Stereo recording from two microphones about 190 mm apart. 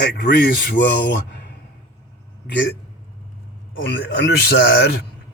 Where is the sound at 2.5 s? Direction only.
65° left (ahead or behind).